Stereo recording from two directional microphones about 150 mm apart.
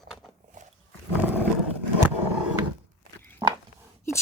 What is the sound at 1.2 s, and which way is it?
Roar, 10° right (ahead or behind).